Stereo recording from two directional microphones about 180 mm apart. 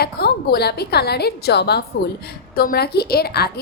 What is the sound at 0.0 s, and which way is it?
A woman's voice, 60° left (ahead or behind).